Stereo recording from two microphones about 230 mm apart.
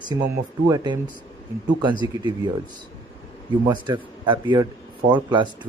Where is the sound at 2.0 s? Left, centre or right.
Centre.